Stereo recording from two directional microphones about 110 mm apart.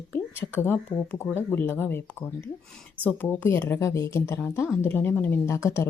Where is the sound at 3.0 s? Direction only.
20° left (ahead or behind).